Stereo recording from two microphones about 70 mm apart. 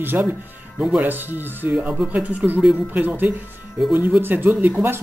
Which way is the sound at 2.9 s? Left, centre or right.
Right.